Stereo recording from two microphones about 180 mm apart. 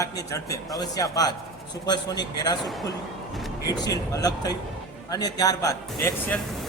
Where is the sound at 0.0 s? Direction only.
15° left (ahead or behind).